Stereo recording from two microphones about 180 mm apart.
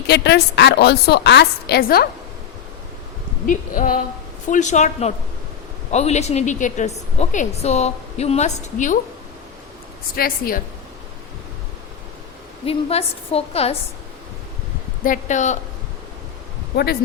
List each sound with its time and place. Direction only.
0.1 s a woman's voice: 65° left (ahead or behind)
3.4 s a woman's voice: 50° left (ahead or behind)
10.2 s a woman's voice: 55° left (ahead or behind)
12.6 s a woman's voice: 35° left (ahead or behind)
15.0 s a woman's voice: 45° left (ahead or behind)
16.7 s a woman's voice: 60° left (ahead or behind)